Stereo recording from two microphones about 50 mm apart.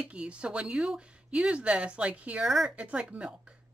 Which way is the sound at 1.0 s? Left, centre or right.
Right.